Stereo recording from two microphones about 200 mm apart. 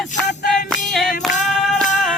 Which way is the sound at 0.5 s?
Centre (ahead or behind).